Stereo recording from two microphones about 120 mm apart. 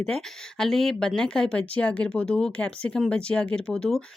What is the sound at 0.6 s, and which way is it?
Speech, centre (ahead or behind).